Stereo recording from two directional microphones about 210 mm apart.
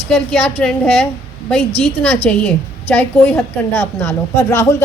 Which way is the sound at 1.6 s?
30° left (ahead or behind).